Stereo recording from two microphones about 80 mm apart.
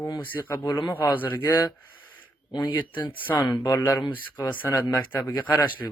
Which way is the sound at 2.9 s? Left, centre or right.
Left.